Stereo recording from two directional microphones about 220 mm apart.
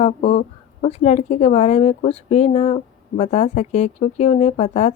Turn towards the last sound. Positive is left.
turn(degrees=30)  # may be behind; listen again after turning